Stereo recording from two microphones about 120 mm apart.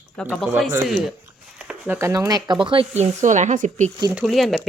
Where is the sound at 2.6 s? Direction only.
45° right (ahead or behind).